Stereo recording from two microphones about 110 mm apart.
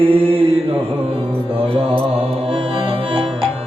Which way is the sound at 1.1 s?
55° right (ahead or behind).